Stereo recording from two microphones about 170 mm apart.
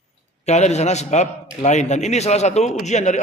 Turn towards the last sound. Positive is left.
turn(degrees=45)  # may be behind; listen again after turning